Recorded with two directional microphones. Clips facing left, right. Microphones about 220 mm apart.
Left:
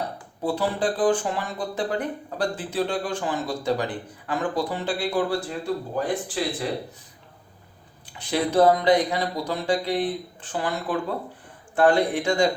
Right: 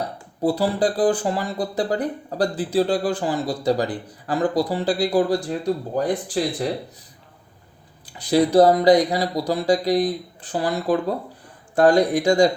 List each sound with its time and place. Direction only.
0.4 s speech: 35° right (ahead or behind)
8.0 s speech: 35° right (ahead or behind)